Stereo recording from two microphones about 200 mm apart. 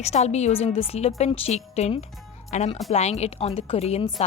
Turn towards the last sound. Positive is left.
turn(degrees=30)  # may be behind; listen again after turning